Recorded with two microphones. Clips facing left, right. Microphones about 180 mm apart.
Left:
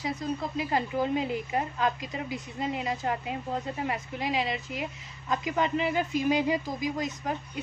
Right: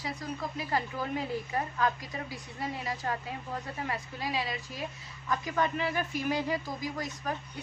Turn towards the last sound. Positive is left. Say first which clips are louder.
# left 3 dB
turn(degrees=20)  # may be behind; listen again after turning